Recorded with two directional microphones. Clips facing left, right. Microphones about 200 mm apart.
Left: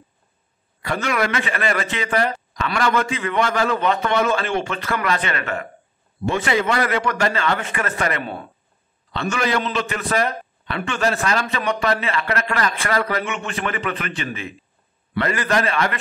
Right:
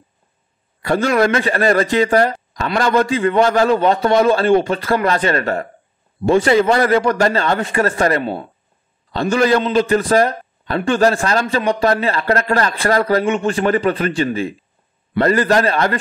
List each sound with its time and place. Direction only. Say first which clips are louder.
0.9 s a man's voice: right 7 dB; 35° right (ahead or behind)